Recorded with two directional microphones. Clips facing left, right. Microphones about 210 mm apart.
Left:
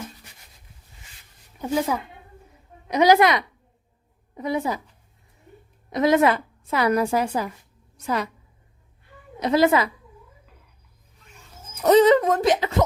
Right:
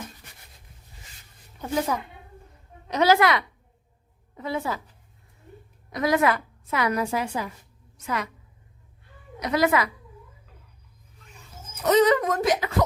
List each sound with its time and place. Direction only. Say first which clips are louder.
1.5 s speech: left 3 dB; 10° left (ahead or behind)
2.5 s a sound: left 4 dB; 15° left (ahead or behind)
4.4 s speech: left 4 dB; 20° left (ahead or behind)
5.9 s a woman's voice: left 4 dB; 25° left (ahead or behind)
9.4 s speech: left 4 dB; 30° left (ahead or behind)
11.9 s speech: left 4 dB; 30° left (ahead or behind)